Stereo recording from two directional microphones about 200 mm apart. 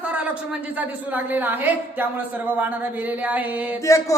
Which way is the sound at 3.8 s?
15° left (ahead or behind).